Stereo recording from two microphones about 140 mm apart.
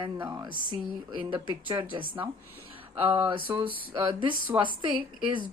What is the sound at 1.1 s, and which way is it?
Speech, 35° right (ahead or behind).